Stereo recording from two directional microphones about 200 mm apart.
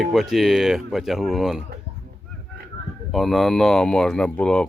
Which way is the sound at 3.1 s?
Centre (ahead or behind).